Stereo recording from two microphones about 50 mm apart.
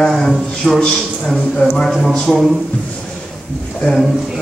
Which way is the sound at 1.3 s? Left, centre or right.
Centre.